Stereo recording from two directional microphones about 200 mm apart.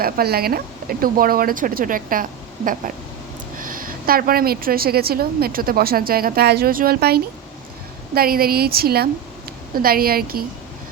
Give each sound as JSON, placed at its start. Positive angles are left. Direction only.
{"t": 0.0, "sound": "a woman's voice", "side_deg": -50}
{"t": 3.6, "sound": "a woman's voice", "side_deg": -45}